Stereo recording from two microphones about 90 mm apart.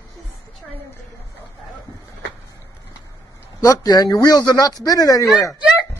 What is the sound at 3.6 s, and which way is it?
Speech, 40° left (ahead or behind).